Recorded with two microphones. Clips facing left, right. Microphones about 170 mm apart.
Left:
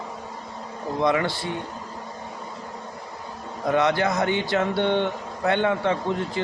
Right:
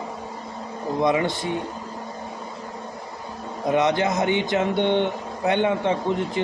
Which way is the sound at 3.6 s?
20° right (ahead or behind).